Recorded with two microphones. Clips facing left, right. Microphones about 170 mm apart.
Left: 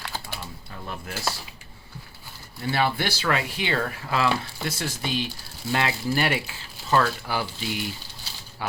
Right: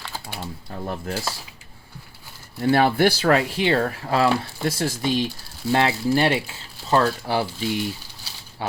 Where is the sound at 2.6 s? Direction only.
50° right (ahead or behind); by 7.5 s 30° right (ahead or behind).